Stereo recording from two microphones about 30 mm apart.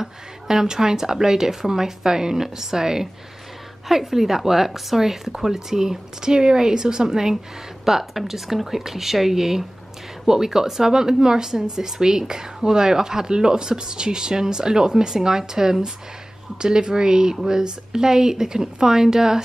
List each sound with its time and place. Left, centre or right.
0.0 s a woman's voice: centre